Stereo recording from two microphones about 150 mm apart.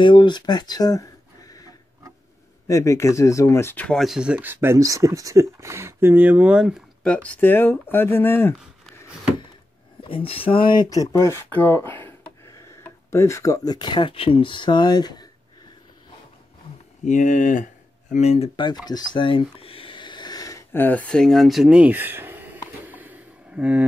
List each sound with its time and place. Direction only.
0.0 s speech: 30° left (ahead or behind)
3.8 s speech: centre (ahead or behind)
7.2 s speech: 10° left (ahead or behind)
10.0 s speech: 35° left (ahead or behind)
17.0 s speech: 55° left (ahead or behind)
18.1 s speech: 45° left (ahead or behind)
18.9 s a sound: 30° left (ahead or behind); by 23.9 s 10° right (ahead or behind)